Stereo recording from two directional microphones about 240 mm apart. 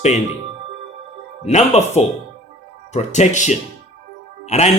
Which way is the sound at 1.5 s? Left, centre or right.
Left.